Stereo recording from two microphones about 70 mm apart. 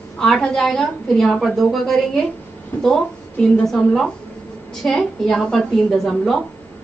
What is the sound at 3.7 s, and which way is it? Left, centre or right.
A woman's voice, centre.